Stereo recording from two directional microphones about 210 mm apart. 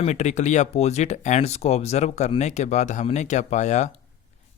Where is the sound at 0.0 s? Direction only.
35° left (ahead or behind).